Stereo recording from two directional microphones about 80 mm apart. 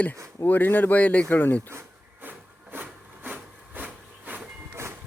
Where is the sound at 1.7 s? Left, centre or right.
Right.